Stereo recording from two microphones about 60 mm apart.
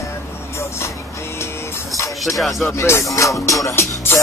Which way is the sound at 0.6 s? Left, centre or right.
Left.